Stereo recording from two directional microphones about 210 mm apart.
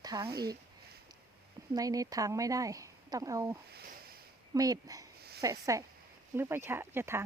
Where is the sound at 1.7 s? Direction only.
15° right (ahead or behind).